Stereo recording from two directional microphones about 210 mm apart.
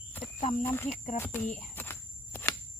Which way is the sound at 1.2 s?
10° left (ahead or behind).